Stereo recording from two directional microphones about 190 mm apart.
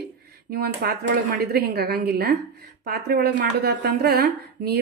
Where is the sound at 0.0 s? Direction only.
55° right (ahead or behind).